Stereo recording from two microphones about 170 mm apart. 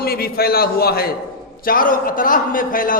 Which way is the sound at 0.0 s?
65° left (ahead or behind).